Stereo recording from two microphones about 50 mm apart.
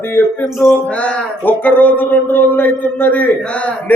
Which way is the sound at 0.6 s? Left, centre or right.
Left.